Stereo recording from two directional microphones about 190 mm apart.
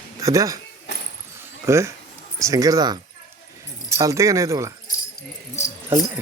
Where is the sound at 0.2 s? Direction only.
15° right (ahead or behind).